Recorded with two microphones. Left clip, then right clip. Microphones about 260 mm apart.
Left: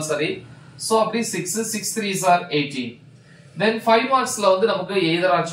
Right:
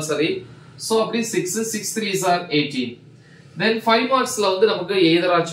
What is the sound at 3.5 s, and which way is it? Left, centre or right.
Speech, centre.